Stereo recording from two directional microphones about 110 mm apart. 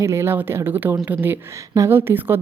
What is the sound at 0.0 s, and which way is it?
Speech, 25° right (ahead or behind).